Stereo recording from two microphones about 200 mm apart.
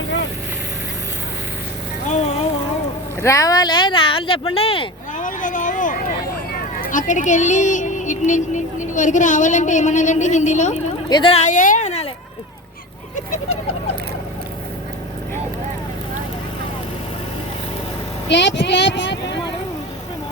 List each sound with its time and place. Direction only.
2.0 s music: 35° left (ahead or behind)
3.2 s speech: 15° left (ahead or behind)
5.2 s a woman's voice: 40° left (ahead or behind)
18.3 s vehicle: 60° left (ahead or behind)